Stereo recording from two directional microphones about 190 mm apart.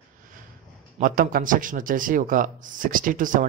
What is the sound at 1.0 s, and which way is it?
A man's voice, 45° right (ahead or behind).